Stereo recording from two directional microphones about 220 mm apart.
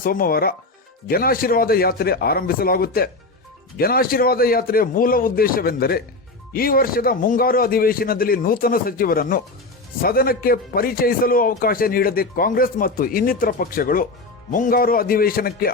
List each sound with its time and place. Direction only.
0.0 s a man's voice: 40° left (ahead or behind)